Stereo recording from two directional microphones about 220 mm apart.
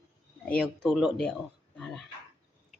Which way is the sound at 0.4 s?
5° left (ahead or behind).